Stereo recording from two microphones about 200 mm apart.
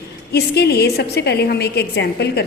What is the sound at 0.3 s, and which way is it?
A woman's voice, 55° left (ahead or behind).